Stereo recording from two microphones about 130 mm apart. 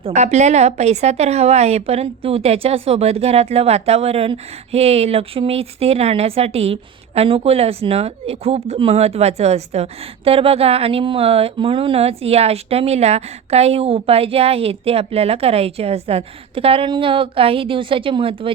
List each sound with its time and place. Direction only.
0.0 s a woman's voice: 60° right (ahead or behind); by 18.5 s 40° right (ahead or behind)